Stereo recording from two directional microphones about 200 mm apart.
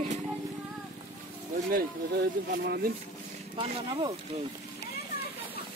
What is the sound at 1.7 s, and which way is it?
Speech, 55° right (ahead or behind).